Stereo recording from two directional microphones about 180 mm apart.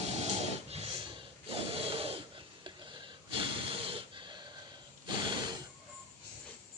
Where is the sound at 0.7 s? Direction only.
35° right (ahead or behind).